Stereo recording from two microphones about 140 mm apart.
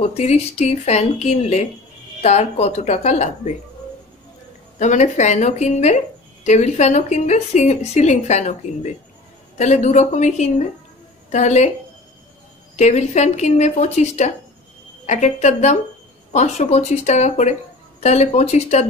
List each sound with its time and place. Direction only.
0.0 s a woman's voice: 50° left (ahead or behind)
4.7 s a woman's voice: 55° left (ahead or behind)
12.7 s a woman's voice: 55° left (ahead or behind)